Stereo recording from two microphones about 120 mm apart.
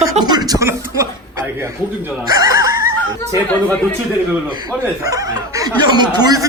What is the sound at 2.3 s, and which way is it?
Snicker, 30° right (ahead or behind).